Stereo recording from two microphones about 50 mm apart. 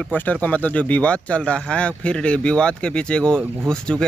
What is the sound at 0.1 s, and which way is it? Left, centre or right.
Speech, left.